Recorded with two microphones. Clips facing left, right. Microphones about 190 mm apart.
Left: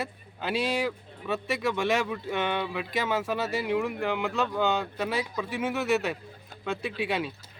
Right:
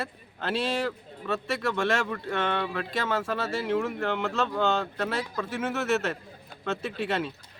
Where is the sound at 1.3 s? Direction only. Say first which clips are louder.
Even; 15° left (ahead or behind).